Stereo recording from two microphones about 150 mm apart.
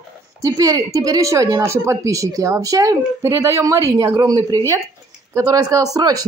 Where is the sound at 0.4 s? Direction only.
20° right (ahead or behind).